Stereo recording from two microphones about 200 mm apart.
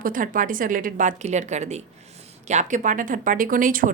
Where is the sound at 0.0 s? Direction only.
45° right (ahead or behind).